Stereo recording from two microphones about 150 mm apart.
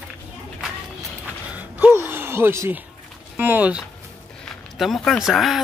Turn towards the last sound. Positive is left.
turn(degrees=0)  # may be behind; listen again after turning